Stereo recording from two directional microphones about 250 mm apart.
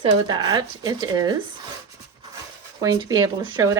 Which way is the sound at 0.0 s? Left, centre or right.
Centre.